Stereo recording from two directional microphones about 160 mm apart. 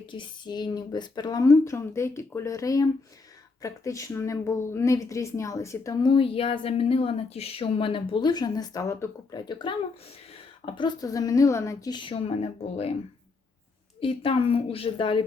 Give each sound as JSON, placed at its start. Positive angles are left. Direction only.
{"t": 0.0, "sound": "speech", "side_deg": 30}
{"t": 10.8, "sound": "speech", "side_deg": 25}
{"t": 14.0, "sound": "a woman's voice", "side_deg": 35}